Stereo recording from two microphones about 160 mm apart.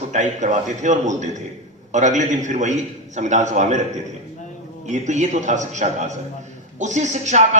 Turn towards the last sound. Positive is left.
turn(degrees=-45)  # may be behind; listen again after turning